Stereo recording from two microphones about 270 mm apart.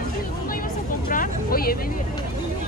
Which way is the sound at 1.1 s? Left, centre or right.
Left.